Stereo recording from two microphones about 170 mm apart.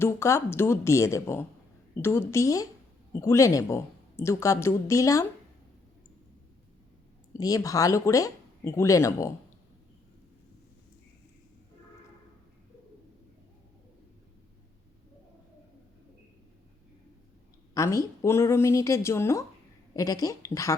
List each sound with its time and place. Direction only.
0.0 s speech: 15° left (ahead or behind)
7.3 s speech: 20° left (ahead or behind)
17.7 s speech: 20° left (ahead or behind)